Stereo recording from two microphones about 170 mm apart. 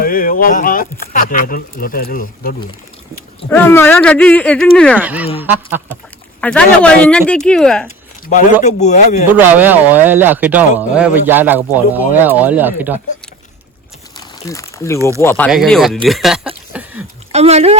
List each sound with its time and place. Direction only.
0.0 s speech: 55° left (ahead or behind)
3.5 s speech: 10° left (ahead or behind)
4.9 s speech: 10° right (ahead or behind)
6.4 s speech: 5° left (ahead or behind)
8.6 s speech: 45° left (ahead or behind)
9.3 s speech: 10° right (ahead or behind)
14.2 s a sound: 20° left (ahead or behind)
15.2 s speech: 15° left (ahead or behind)
15.4 s speech: centre (ahead or behind)
16.7 s a sound: 5° right (ahead or behind)
17.3 s speech: 40° right (ahead or behind)